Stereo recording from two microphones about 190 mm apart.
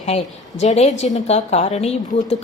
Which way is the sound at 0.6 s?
40° left (ahead or behind).